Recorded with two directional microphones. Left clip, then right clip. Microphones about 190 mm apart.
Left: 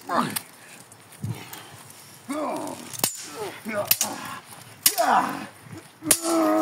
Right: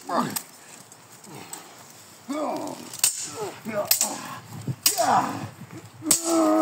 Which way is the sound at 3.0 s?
5° left (ahead or behind).